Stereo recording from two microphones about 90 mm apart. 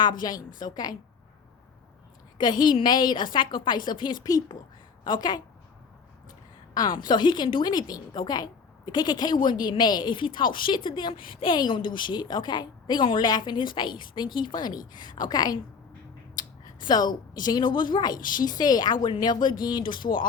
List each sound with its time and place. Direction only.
0.0 s speech: 50° left (ahead or behind)
2.4 s a woman's voice: 55° left (ahead or behind)
6.7 s a woman's voice: 50° left (ahead or behind)